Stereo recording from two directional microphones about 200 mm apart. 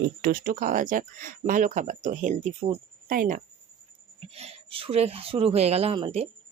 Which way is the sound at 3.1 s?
45° right (ahead or behind).